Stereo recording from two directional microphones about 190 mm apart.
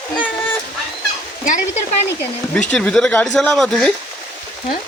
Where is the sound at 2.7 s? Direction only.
5° left (ahead or behind).